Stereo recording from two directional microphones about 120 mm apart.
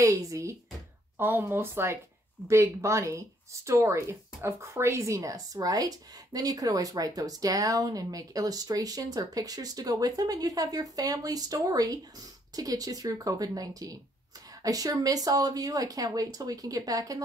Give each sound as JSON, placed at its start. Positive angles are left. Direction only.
{"t": 0.0, "sound": "speech", "side_deg": -30}